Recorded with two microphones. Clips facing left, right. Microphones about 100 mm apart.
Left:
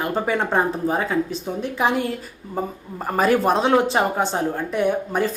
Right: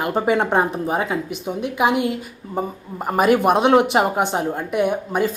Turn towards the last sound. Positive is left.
turn(degrees=-15)  # may be behind; listen again after turning